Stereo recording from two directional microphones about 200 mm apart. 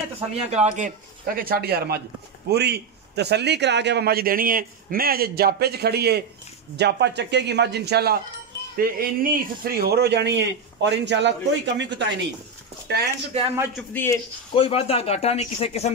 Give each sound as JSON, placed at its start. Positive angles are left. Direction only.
{"t": 0.3, "sound": "a man's voice", "side_deg": -35}
{"t": 13.9, "sound": "speech", "side_deg": 15}
{"t": 14.5, "sound": "speech", "side_deg": 30}